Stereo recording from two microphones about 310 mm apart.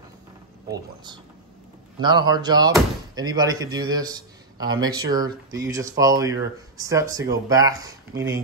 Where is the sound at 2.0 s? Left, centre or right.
Centre.